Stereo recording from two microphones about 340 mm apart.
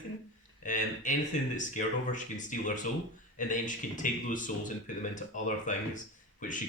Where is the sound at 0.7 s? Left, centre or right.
Left.